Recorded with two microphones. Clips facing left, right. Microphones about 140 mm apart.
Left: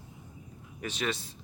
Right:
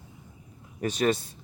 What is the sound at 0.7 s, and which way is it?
Speech, 40° right (ahead or behind).